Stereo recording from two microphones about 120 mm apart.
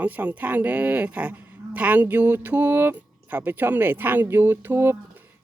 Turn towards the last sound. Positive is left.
turn(degrees=-15)  # may be behind; listen again after turning